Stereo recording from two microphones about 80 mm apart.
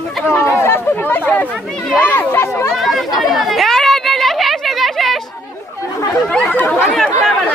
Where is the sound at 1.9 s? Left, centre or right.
Left.